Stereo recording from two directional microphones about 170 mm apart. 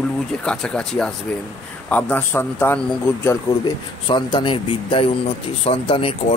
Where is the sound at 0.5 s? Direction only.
5° left (ahead or behind).